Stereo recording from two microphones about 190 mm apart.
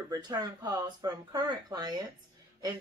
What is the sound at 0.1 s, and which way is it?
Speech, 20° right (ahead or behind).